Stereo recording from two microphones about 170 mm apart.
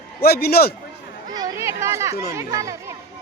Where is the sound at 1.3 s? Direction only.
20° right (ahead or behind).